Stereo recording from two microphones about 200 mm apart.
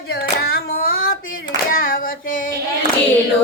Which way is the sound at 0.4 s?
50° left (ahead or behind).